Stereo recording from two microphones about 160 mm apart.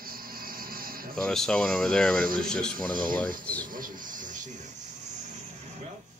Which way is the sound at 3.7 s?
55° right (ahead or behind).